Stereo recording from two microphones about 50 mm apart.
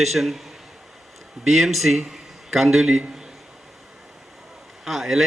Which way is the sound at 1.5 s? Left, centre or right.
Centre.